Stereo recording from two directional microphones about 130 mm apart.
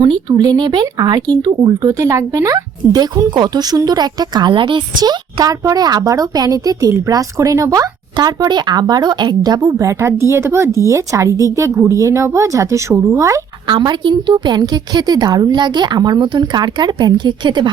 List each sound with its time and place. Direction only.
0.0 s speech: 35° right (ahead or behind)
13.7 s a woman's voice: 35° right (ahead or behind)